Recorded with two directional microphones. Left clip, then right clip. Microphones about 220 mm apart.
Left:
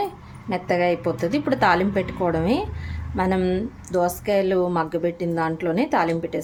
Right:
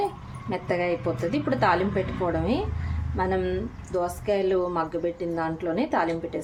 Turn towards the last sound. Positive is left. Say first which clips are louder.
# left 4 dB
turn(degrees=25)  # may be behind; listen again after turning